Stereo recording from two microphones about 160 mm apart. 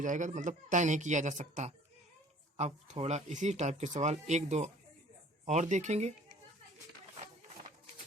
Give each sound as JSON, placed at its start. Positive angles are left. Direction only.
{"t": 0.0, "sound": "speech", "side_deg": -50}